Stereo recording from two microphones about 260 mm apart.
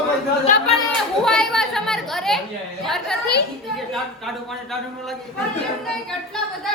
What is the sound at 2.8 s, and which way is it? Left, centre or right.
Speech, centre.